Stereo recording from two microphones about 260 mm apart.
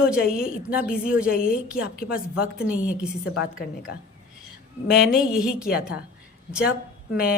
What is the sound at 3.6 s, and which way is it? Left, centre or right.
Speech, left.